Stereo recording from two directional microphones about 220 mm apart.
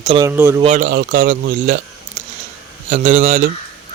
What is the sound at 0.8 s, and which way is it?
Speech, 50° right (ahead or behind).